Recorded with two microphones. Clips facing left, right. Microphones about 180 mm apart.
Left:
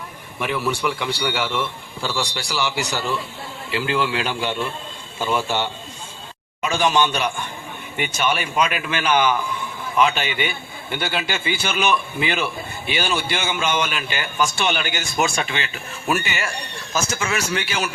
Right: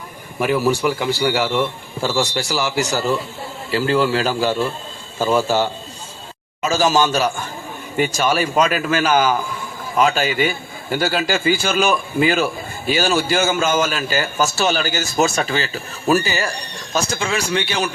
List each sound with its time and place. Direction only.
0.3 s a man's voice: 40° right (ahead or behind)